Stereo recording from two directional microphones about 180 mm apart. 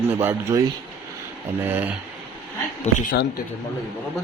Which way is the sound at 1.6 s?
10° right (ahead or behind).